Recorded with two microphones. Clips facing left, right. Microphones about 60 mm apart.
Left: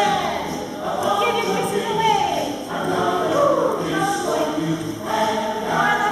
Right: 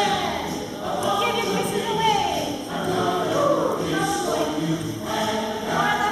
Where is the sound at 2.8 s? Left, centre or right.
Centre.